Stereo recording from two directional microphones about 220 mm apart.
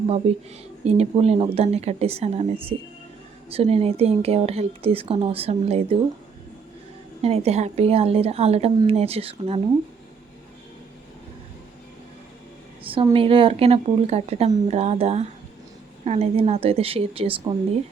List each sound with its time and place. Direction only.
0.2 s a woman's voice: 25° right (ahead or behind)
7.2 s a woman's voice: 30° right (ahead or behind)
12.8 s a woman's voice: 25° right (ahead or behind)